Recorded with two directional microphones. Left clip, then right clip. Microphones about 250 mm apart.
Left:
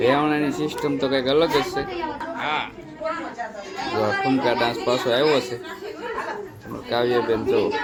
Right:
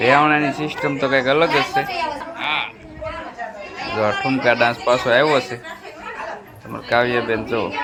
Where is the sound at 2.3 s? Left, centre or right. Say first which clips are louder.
Right 3 dB; centre.